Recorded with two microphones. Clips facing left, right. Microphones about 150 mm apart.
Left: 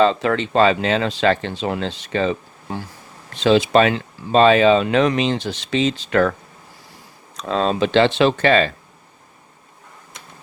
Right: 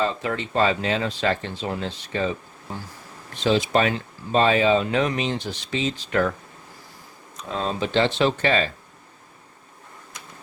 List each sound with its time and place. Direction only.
0.0 s speech: 90° left
7.3 s speech: 90° left